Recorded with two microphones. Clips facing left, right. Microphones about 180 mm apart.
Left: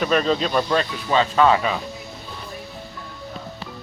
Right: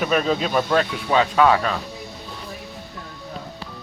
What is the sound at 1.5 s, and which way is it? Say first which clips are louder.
Speech: even; 5° left (ahead or behind).